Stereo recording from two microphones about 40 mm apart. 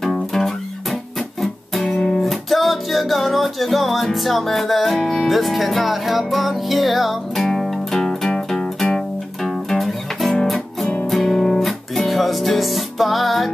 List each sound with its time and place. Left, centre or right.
0.0 s music: centre
1.8 s music: centre
2.2 s music: centre